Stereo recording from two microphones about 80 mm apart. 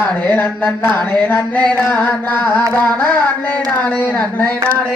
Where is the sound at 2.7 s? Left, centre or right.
Centre.